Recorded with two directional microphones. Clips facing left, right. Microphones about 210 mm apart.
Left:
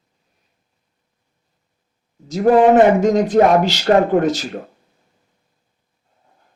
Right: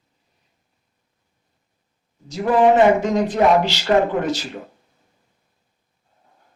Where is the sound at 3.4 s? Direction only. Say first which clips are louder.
Left 2 dB; 45° left (ahead or behind).